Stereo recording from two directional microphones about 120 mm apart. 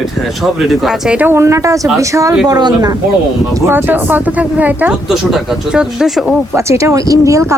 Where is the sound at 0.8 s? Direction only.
5° right (ahead or behind).